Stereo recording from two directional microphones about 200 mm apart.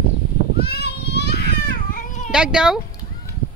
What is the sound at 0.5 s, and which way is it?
Children playing, 50° left (ahead or behind).